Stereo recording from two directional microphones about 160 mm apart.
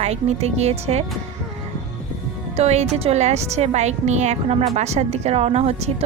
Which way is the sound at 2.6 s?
40° right (ahead or behind).